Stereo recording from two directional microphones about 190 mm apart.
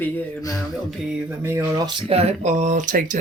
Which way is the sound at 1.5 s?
15° right (ahead or behind).